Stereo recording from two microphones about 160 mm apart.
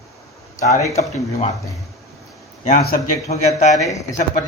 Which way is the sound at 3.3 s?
45° left (ahead or behind).